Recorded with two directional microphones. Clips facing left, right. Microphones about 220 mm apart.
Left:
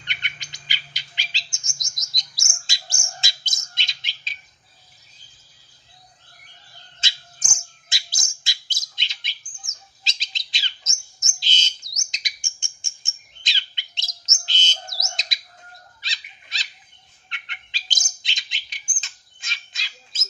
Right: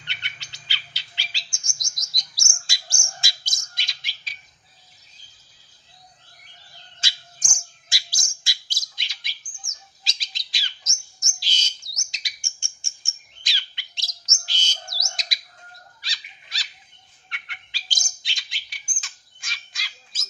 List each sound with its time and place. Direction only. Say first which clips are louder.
0.0 s bird: left 3 dB; 15° left (ahead or behind)
7.0 s bird: left 2 dB; 25° left (ahead or behind)
16.0 s dog: left 2 dB; 20° left (ahead or behind)
17.3 s bird: left 2 dB; 20° left (ahead or behind)